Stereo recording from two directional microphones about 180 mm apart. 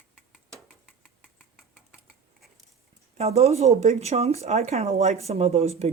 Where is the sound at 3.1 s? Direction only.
35° right (ahead or behind).